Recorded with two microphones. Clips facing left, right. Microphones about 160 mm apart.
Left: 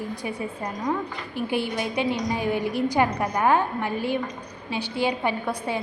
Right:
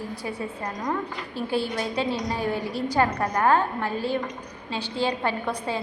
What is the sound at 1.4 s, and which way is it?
A woman's voice, 15° left (ahead or behind).